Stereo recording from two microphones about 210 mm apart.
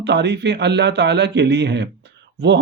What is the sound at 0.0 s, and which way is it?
Speech, 55° right (ahead or behind).